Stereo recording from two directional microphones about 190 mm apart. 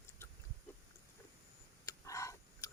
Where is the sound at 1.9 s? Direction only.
15° left (ahead or behind).